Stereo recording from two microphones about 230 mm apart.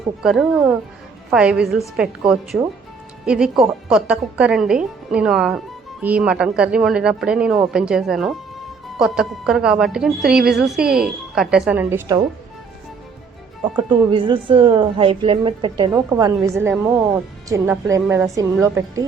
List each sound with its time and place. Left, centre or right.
0.2 s a woman's voice: centre
13.7 s a woman's voice: right